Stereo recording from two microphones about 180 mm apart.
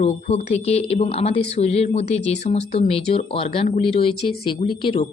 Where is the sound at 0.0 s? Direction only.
35° left (ahead or behind).